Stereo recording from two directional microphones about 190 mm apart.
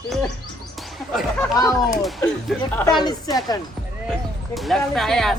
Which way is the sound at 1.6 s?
20° left (ahead or behind).